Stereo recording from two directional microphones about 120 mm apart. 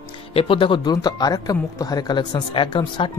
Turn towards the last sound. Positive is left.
turn(degrees=45)  # may be behind; listen again after turning